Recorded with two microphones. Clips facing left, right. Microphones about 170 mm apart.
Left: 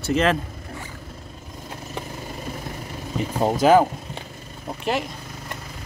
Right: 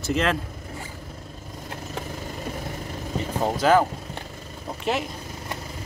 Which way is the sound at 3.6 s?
15° left (ahead or behind).